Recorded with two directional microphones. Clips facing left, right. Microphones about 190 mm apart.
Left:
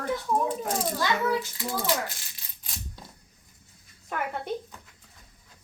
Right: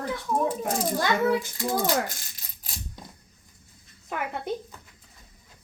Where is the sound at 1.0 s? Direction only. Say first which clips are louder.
Right 3 dB; 50° right (ahead or behind).